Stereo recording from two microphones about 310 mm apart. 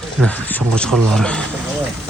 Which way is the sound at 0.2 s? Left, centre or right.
Centre.